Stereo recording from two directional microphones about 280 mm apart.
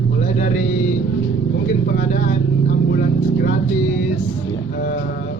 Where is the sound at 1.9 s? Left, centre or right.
Left.